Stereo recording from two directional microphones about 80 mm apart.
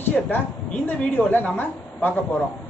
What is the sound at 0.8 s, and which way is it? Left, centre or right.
A man's voice, left.